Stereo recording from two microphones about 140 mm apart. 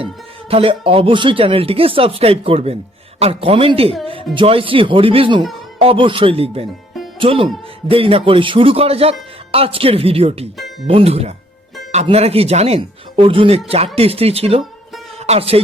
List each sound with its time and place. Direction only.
0.5 s speech: 40° right (ahead or behind)